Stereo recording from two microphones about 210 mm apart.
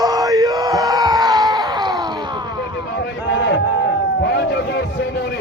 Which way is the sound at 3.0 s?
60° left (ahead or behind).